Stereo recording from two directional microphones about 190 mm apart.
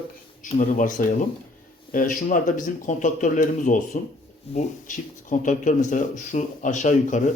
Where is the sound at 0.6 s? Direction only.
45° left (ahead or behind).